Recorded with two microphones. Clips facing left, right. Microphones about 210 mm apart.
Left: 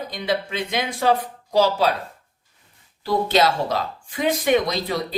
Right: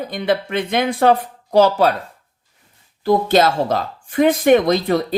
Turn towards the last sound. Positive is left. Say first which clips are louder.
# right 8 dB
turn(degrees=-50)  # may be behind; listen again after turning